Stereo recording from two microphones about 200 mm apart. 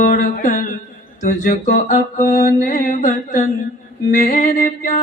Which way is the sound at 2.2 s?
15° left (ahead or behind).